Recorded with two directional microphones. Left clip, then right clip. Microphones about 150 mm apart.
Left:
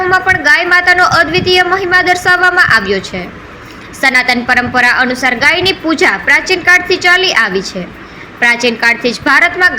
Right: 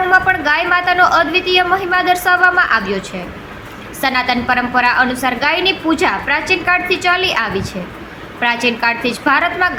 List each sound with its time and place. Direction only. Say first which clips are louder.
0.1 s a woman's voice: left 5 dB; 15° left (ahead or behind)